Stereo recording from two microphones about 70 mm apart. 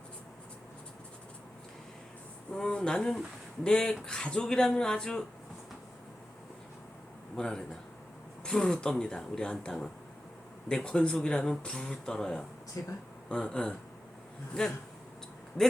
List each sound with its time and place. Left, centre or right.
2.5 s speech: centre
7.3 s speech: centre
12.8 s speech: left
13.2 s speech: centre